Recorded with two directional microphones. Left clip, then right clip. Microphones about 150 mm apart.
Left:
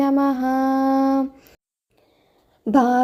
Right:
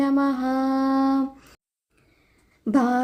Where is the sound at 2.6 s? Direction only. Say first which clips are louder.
Left 5 dB; 15° left (ahead or behind).